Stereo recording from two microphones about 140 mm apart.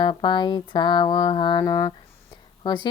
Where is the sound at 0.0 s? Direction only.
35° left (ahead or behind).